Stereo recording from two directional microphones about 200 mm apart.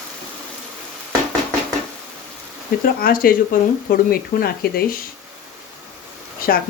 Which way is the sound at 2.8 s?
45° left (ahead or behind).